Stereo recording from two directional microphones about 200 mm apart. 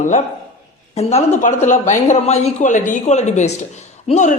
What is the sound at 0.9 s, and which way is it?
A man's voice, 35° left (ahead or behind).